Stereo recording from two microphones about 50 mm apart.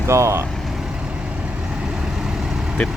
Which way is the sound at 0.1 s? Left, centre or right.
Right.